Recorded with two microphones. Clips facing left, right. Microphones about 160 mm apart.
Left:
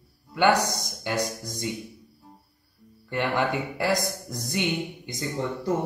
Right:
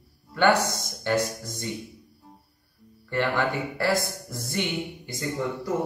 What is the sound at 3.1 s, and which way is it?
Speech, 20° left (ahead or behind).